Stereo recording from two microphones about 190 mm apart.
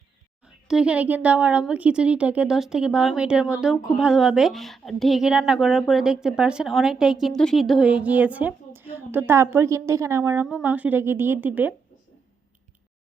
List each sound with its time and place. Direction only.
0.4 s speech: 5° right (ahead or behind)